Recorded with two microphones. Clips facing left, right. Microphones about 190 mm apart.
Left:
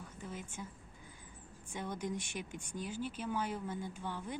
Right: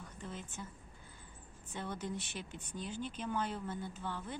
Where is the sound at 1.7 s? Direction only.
10° left (ahead or behind).